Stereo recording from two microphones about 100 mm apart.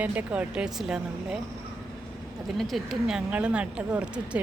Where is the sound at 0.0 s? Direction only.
15° right (ahead or behind).